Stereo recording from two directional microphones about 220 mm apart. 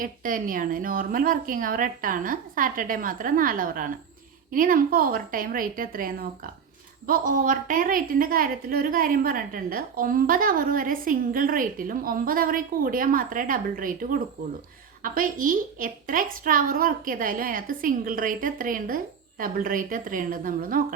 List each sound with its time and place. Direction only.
0.0 s a woman's voice: 40° right (ahead or behind)